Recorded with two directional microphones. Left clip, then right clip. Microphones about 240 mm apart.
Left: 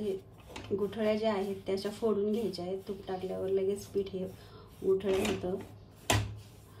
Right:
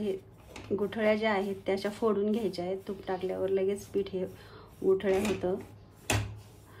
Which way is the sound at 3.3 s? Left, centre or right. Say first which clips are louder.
Right 2 dB; right.